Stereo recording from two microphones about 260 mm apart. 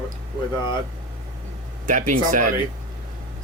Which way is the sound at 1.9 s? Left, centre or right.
Right.